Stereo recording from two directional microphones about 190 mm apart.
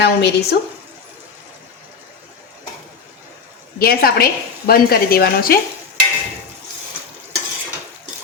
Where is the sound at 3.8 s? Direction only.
50° left (ahead or behind).